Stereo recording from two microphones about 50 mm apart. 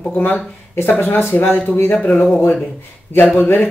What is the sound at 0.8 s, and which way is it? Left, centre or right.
Speech, left.